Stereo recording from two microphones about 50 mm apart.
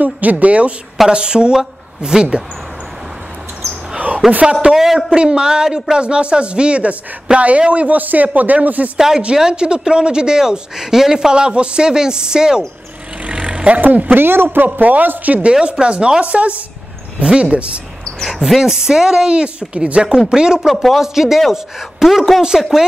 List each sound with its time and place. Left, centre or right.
0.0 s a man's voice: right; by 2.4 s centre
4.5 s a man's voice: centre; by 8.9 s right
8.9 s speech: centre
13.2 s vehicle: right
13.7 s a man's voice: right
14.1 s a man's voice: right
15.8 s a man's voice: centre
18.2 s speech: centre
20.6 s speech: centre